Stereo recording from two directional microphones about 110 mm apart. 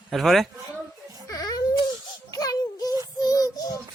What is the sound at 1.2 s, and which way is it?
Music, 35° left (ahead or behind).